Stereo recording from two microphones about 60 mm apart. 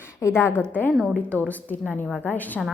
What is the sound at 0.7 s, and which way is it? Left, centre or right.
A woman's voice, left.